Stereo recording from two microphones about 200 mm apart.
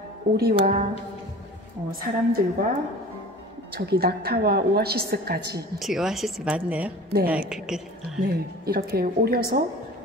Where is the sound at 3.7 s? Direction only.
50° right (ahead or behind).